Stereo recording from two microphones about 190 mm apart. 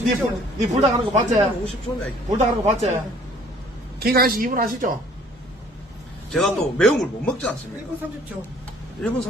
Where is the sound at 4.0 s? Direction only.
55° right (ahead or behind).